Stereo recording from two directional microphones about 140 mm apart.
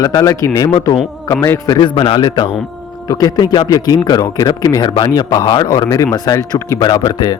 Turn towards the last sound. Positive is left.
turn(degrees=30)  # may be behind; listen again after turning